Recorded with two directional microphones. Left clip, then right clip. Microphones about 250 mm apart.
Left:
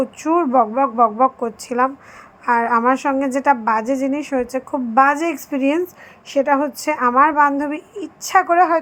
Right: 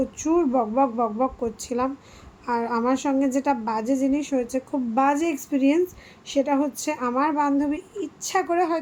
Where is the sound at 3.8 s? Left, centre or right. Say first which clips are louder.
Left 4 dB; left.